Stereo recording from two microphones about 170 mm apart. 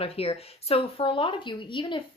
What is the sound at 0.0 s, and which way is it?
A woman's voice, 35° left (ahead or behind).